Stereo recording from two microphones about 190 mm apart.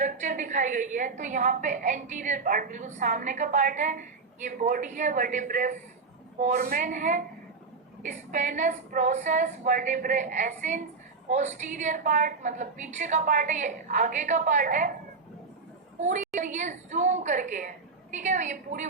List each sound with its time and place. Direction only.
0.0 s a woman's voice: 40° right (ahead or behind)
16.0 s a woman's voice: 40° right (ahead or behind)